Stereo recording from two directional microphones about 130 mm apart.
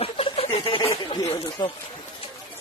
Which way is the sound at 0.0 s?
45° left (ahead or behind).